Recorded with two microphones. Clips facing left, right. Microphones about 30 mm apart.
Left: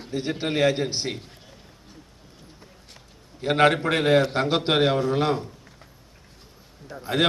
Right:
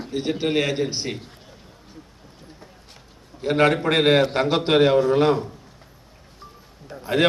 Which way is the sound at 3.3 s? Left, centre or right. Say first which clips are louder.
Right 2 dB; centre.